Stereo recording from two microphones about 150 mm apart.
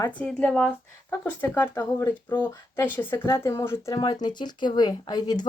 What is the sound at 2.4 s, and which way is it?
Speech, 10° left (ahead or behind).